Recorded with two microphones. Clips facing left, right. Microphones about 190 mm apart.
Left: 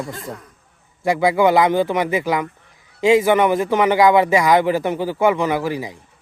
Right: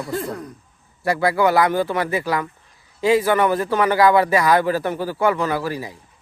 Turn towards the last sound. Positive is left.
turn(degrees=20)  # may be behind; listen again after turning